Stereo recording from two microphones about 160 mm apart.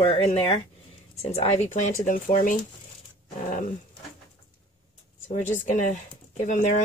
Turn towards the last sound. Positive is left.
turn(degrees=50)  # may be behind; listen again after turning